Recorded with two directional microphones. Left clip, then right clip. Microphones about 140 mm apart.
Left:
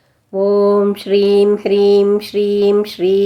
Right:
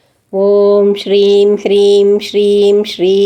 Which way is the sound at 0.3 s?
25° right (ahead or behind).